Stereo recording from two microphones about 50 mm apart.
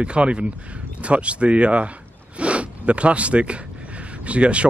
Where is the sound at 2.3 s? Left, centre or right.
Right.